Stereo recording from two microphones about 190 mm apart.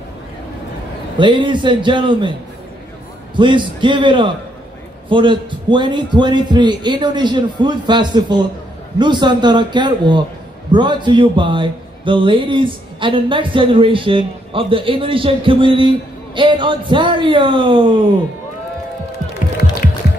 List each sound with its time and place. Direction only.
1.1 s speech: 25° right (ahead or behind)
3.3 s speech: 25° right (ahead or behind)